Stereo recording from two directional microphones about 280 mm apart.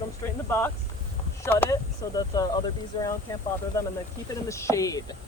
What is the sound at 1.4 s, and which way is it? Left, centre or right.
Speech, centre.